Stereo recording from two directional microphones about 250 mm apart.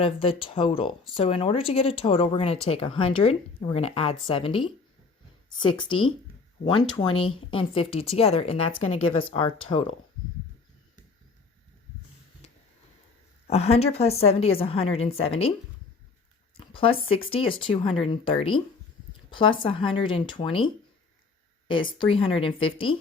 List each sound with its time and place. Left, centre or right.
0.0 s speech: left
13.5 s speech: left
16.6 s speech: left
21.7 s speech: centre